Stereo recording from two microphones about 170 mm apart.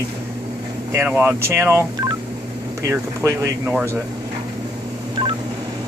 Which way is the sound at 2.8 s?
15° right (ahead or behind).